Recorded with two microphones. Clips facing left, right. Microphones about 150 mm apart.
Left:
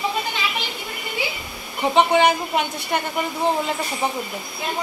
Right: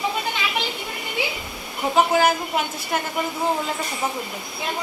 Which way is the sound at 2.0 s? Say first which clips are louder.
Left 2 dB; 5° right (ahead or behind).